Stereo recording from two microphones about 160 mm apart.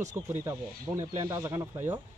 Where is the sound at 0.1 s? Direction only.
15° right (ahead or behind).